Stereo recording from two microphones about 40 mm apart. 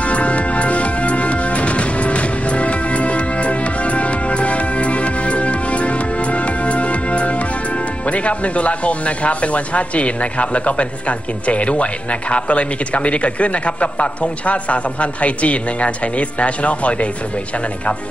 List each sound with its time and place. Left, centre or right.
0.0 s music: left
8.1 s speech: left